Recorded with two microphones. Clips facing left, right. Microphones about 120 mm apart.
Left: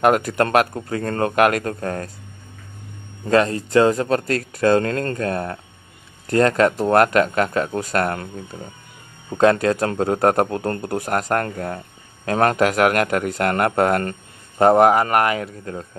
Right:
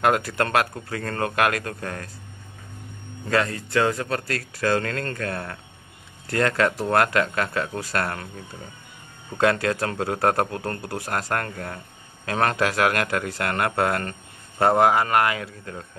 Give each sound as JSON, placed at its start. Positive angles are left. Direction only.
{"t": 0.0, "sound": "a man's voice", "side_deg": 20}
{"t": 3.3, "sound": "a man's voice", "side_deg": 25}
{"t": 9.4, "sound": "a man's voice", "side_deg": 25}